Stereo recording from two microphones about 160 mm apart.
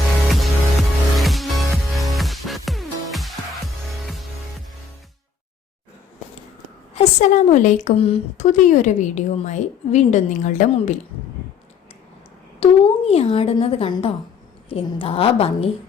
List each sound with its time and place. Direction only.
0.3 s music: centre (ahead or behind)
6.9 s a woman's voice: 45° left (ahead or behind)
7.9 s speech: 35° left (ahead or behind)
8.5 s a woman's voice: 50° left (ahead or behind)
12.5 s speech: 40° left (ahead or behind)